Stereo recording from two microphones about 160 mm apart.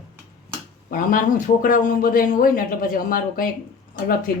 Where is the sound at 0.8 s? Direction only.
60° left (ahead or behind).